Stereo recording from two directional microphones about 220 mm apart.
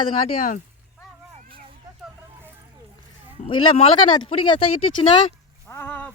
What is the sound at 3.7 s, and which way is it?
Speech, 25° left (ahead or behind).